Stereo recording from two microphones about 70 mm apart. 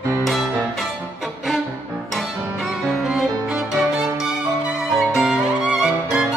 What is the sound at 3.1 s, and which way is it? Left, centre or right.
Violin, centre.